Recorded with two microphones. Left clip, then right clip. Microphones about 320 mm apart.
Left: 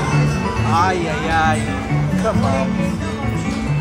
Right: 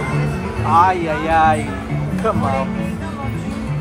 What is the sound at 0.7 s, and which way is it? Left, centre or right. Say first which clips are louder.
Music: right 5 dB; centre.